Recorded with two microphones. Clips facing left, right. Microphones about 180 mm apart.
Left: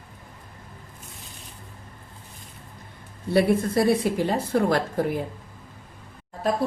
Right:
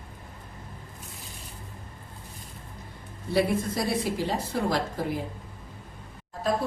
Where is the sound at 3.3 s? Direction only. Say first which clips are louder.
Left 5 dB; 55° left (ahead or behind).